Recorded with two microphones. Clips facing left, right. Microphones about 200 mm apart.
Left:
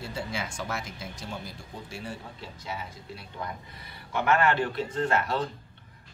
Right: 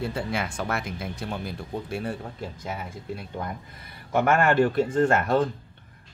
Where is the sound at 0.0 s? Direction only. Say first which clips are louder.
Right 6 dB; 55° right (ahead or behind).